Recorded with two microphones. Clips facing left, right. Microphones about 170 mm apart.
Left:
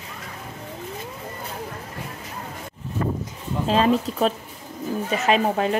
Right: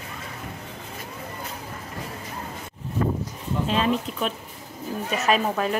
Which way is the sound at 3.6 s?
40° left (ahead or behind).